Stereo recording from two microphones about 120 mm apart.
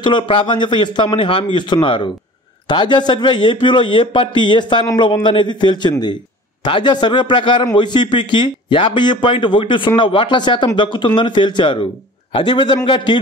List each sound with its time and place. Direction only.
0.0 s a man's voice: 45° left (ahead or behind)